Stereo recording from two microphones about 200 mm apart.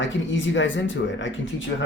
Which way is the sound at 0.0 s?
70° left (ahead or behind).